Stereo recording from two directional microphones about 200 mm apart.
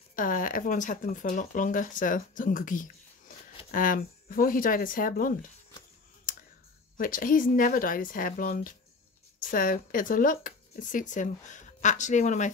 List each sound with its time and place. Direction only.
0.1 s speech: 45° left (ahead or behind)
7.0 s speech: 45° left (ahead or behind)